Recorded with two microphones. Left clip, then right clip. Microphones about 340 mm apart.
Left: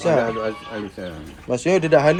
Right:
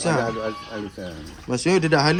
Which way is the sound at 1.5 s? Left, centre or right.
Centre.